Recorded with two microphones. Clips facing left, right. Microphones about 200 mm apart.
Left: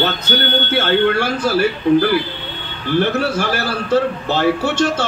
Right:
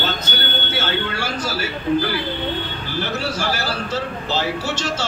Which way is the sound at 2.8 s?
55° left (ahead or behind).